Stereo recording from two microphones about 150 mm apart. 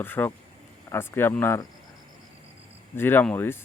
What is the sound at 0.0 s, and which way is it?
Speech, 15° left (ahead or behind).